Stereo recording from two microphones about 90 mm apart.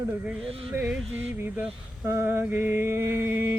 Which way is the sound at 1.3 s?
25° right (ahead or behind).